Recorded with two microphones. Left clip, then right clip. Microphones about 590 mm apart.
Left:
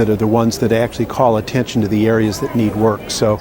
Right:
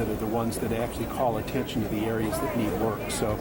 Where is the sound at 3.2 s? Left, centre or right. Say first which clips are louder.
Left 15 dB; left.